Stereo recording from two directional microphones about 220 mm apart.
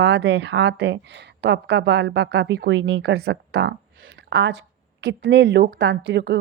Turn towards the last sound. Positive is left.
turn(degrees=-50)  # may be behind; listen again after turning